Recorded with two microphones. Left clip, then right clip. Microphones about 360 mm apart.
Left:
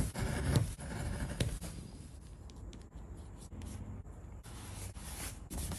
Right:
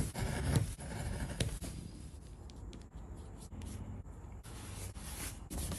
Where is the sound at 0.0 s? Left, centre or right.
Centre.